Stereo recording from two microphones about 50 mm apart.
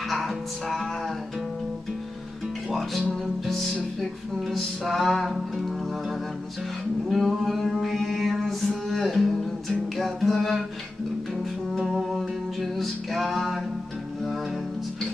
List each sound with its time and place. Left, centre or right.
0.1 s music: centre
4.5 s music: centre
7.1 s music: centre
11.7 s music: centre